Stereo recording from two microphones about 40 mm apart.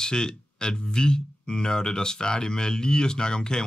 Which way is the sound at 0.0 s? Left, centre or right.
Centre.